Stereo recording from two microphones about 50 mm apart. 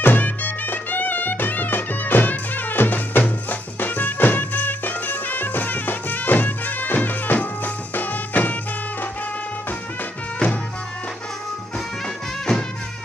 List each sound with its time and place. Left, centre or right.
0.0 s music: left
12.5 s music: centre